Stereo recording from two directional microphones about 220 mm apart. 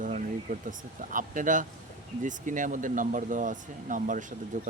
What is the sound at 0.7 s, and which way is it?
Speech, 35° right (ahead or behind).